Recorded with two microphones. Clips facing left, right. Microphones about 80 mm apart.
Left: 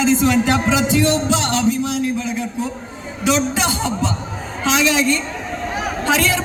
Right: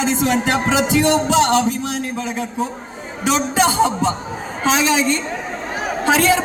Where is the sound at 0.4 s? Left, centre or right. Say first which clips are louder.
Even; right.